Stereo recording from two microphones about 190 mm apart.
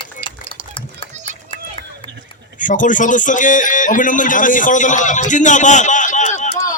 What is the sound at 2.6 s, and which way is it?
A man's voice, 45° left (ahead or behind).